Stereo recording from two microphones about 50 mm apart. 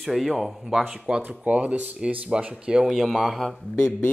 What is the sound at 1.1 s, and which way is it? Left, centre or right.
Speech, right.